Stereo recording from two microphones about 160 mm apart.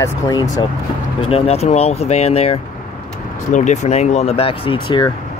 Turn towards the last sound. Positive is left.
turn(degrees=30)  # may be behind; listen again after turning